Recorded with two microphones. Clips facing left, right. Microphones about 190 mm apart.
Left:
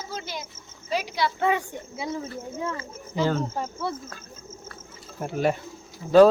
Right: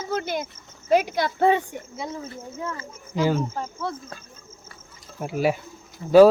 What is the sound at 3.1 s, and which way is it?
Speech, 10° right (ahead or behind).